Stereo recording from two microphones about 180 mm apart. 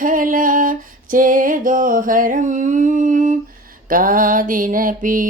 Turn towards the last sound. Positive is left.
turn(degrees=-50)  # may be behind; listen again after turning